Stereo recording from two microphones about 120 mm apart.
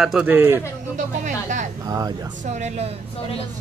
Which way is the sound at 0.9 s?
90° right.